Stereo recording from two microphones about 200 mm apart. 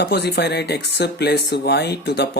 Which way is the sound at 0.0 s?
55° left (ahead or behind).